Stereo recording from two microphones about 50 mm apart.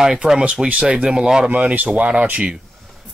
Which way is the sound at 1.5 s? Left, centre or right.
Right.